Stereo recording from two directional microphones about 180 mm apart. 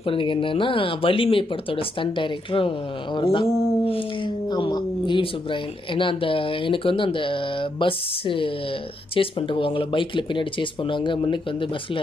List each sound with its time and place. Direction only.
0.0 s speech: 30° left (ahead or behind)